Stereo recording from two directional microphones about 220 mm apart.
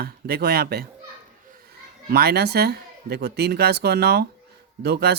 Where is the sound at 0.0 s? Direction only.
45° right (ahead or behind).